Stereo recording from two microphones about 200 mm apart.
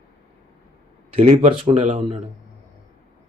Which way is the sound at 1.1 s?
30° right (ahead or behind).